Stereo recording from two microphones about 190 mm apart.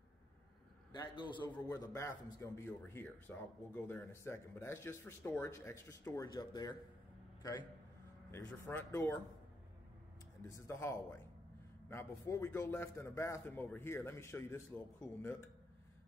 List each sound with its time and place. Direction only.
0.9 s a man's voice: 25° left (ahead or behind)
10.5 s speech: 15° left (ahead or behind)